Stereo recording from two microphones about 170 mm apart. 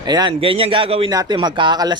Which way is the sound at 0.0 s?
25° right (ahead or behind).